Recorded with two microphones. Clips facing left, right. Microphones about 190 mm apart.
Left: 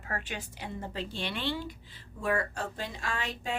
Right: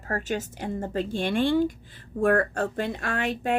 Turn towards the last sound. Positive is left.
turn(degrees=-60)  # may be behind; listen again after turning